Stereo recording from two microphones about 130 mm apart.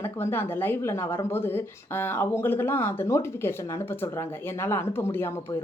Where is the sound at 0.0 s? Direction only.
20° left (ahead or behind).